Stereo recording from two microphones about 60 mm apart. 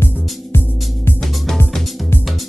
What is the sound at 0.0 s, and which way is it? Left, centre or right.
Music, left.